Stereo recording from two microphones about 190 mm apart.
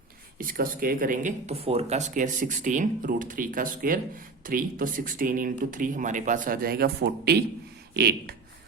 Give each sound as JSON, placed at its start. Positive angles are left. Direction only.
{"t": 0.3, "sound": "speech", "side_deg": -45}